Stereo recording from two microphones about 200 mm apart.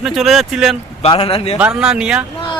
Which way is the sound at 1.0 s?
25° left (ahead or behind).